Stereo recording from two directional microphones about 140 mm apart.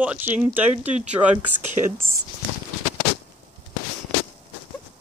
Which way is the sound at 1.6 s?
65° right (ahead or behind).